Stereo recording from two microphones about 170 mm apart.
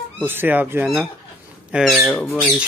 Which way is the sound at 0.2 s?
10° right (ahead or behind).